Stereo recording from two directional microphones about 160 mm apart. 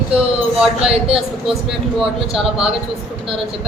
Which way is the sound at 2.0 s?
Centre (ahead or behind).